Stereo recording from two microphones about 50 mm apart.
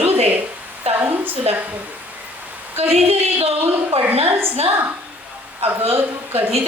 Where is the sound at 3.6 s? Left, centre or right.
Right.